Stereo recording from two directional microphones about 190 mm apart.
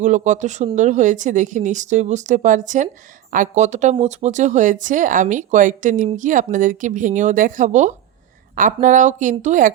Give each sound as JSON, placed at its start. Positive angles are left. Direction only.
{"t": 0.0, "sound": "speech", "side_deg": -40}